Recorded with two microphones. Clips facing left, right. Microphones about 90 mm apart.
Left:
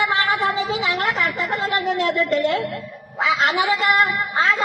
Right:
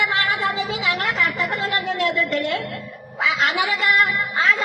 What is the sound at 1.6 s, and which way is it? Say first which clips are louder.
A man's voice: left 3 dB; 25° left (ahead or behind).